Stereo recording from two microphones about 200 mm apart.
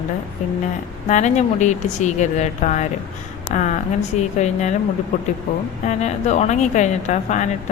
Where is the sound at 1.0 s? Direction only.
35° left (ahead or behind).